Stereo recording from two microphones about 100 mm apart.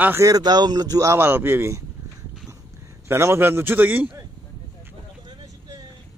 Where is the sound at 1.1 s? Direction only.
25° right (ahead or behind).